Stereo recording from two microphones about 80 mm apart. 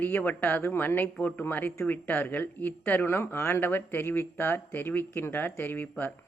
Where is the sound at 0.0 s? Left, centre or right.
Left.